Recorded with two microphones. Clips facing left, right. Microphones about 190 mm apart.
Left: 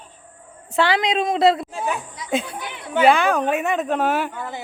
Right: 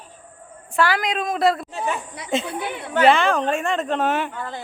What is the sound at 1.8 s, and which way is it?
Speech, centre (ahead or behind).